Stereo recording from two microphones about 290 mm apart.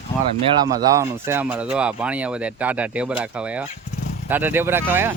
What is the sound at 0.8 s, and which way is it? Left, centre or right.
Speech, centre.